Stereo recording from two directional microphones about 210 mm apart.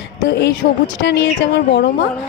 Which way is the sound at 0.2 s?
50° left (ahead or behind).